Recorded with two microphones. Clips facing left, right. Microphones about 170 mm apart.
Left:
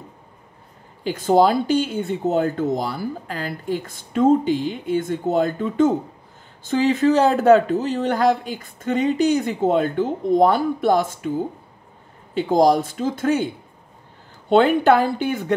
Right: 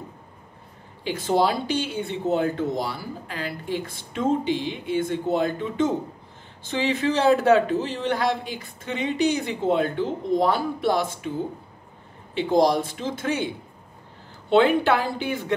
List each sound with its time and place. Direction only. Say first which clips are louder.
1.0 s speech: left 5 dB; 45° left (ahead or behind)
14.5 s speech: left 4 dB; 45° left (ahead or behind)